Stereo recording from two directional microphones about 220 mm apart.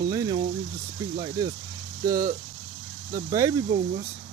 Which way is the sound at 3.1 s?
15° right (ahead or behind).